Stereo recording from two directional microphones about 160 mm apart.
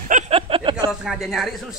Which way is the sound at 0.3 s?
35° right (ahead or behind).